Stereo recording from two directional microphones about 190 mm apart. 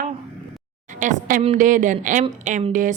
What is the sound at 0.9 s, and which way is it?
A woman's voice, 40° right (ahead or behind).